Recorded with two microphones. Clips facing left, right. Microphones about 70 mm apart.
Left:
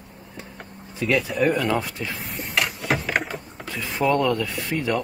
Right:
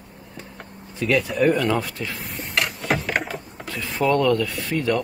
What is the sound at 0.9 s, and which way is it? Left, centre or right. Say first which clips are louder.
A man's voice: right 1 dB; centre.